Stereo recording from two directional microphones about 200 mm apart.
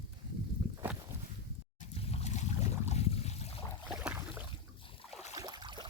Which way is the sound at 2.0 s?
30° left (ahead or behind).